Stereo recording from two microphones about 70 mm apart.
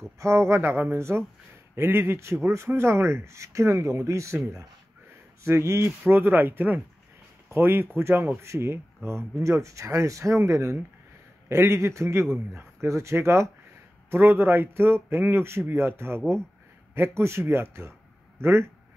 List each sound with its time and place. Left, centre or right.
0.2 s a man's voice: right
5.4 s a man's voice: right